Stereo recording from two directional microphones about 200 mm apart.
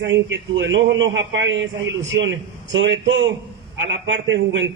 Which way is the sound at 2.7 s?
70° right (ahead or behind).